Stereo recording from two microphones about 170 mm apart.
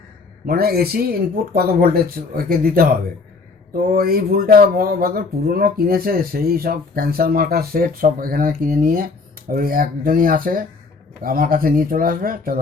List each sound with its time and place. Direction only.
0.4 s speech: 65° right (ahead or behind)